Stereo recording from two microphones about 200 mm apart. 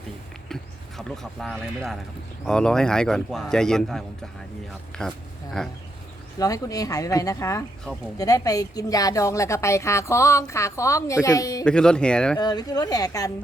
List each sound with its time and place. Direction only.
0.4 s a man's voice: centre (ahead or behind)
6.4 s a woman's voice: 15° left (ahead or behind)
8.2 s a woman's voice: 20° left (ahead or behind)
11.6 s a man's voice: 5° left (ahead or behind)
12.4 s speech: 20° left (ahead or behind)